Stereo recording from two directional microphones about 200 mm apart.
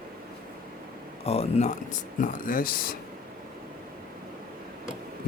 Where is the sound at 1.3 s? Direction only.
30° left (ahead or behind).